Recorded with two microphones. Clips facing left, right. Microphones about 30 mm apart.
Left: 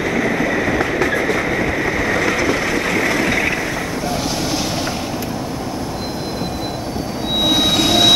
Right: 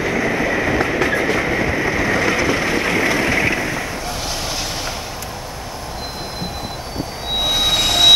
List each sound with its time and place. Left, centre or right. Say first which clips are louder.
0.2 s vehicle: left 1 dB; right
0.5 s vehicle: even; centre
0.9 s train: even; right
2.7 s vehicle: even; right
7.4 s train: left 2 dB; centre